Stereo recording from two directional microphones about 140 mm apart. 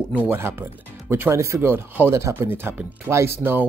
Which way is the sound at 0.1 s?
15° right (ahead or behind).